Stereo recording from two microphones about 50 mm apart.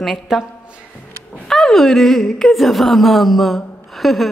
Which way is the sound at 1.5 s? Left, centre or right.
Centre.